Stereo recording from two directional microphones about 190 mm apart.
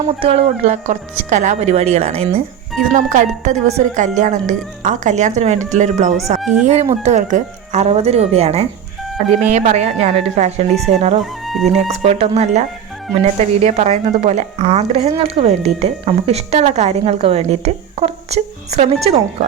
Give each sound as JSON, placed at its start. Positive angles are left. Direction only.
{"t": 0.2, "sound": "speech", "side_deg": -30}
{"t": 11.2, "sound": "speech", "side_deg": 0}
{"t": 11.6, "sound": "speech", "side_deg": -35}